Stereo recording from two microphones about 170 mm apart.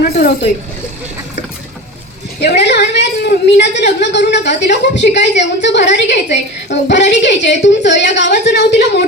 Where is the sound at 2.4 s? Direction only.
85° left.